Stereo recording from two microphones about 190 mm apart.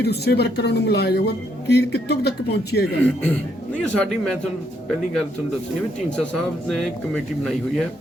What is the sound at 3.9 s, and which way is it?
Speech, 5° left (ahead or behind).